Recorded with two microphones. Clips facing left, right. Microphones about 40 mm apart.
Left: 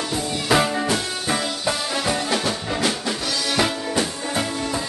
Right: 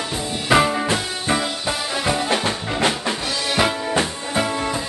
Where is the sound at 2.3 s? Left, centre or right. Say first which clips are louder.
Right 2 dB; right.